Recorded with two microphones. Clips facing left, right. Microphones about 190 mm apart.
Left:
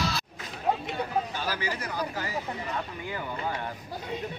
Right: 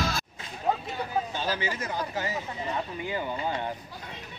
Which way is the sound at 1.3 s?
20° right (ahead or behind).